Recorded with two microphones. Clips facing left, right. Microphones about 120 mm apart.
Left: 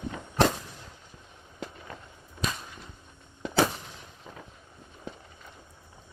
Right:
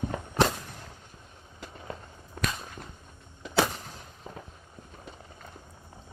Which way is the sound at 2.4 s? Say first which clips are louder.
Even; 55° right (ahead or behind).